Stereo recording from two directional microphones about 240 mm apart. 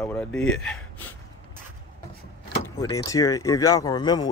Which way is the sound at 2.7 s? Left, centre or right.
Centre.